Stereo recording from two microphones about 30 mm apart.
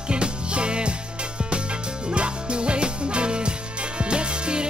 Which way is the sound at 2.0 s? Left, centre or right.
Right.